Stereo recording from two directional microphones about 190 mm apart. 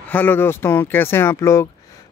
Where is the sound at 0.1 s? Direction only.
10° left (ahead or behind).